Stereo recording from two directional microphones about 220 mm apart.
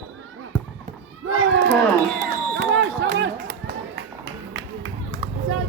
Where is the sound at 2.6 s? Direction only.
55° right (ahead or behind).